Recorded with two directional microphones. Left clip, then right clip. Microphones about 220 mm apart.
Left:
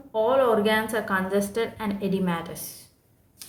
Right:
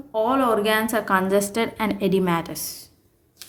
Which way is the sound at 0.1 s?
50° right (ahead or behind).